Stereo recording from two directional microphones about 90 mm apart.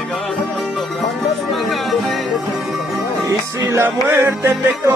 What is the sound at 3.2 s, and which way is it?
Music, 25° right (ahead or behind).